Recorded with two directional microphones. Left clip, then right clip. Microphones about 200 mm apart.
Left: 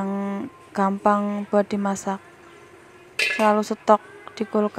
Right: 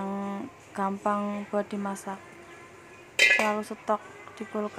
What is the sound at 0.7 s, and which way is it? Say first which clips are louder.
Speech: left 8 dB; 30° left (ahead or behind).